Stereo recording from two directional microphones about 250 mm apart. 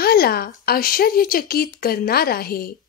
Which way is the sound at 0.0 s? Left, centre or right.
Left.